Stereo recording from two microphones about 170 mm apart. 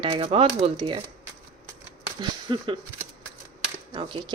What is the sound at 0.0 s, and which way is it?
Speech, 30° right (ahead or behind).